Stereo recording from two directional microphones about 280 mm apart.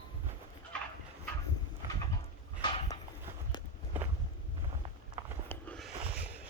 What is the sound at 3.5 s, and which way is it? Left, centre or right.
Walk, centre.